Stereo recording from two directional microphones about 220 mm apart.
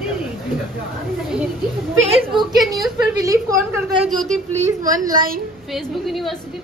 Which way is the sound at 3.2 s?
15° right (ahead or behind).